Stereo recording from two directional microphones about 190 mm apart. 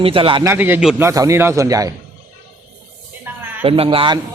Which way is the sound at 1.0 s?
15° right (ahead or behind).